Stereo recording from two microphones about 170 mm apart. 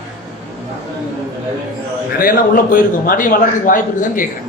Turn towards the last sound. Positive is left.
turn(degrees=55)  # may be behind; listen again after turning